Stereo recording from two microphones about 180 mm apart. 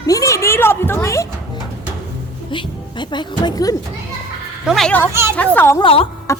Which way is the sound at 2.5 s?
25° left (ahead or behind).